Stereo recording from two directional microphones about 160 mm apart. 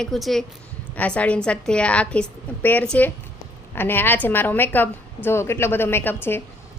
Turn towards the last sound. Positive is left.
turn(degrees=15)  # may be behind; listen again after turning